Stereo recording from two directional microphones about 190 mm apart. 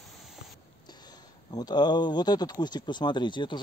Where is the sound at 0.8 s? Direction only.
20° left (ahead or behind).